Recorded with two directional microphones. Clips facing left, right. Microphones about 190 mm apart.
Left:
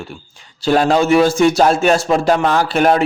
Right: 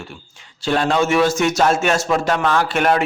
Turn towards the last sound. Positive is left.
turn(degrees=35)  # may be behind; listen again after turning